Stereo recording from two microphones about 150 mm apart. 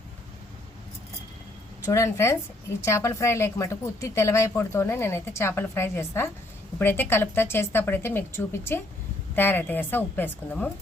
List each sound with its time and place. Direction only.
1.9 s speech: 20° left (ahead or behind)